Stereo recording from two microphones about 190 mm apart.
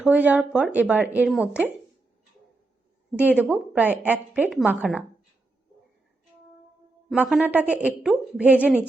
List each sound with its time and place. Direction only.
0.0 s a woman's voice: 10° right (ahead or behind)
3.2 s a woman's voice: 10° right (ahead or behind)
7.1 s a woman's voice: 5° right (ahead or behind)